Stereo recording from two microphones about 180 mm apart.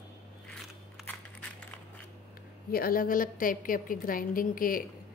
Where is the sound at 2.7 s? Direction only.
55° left (ahead or behind).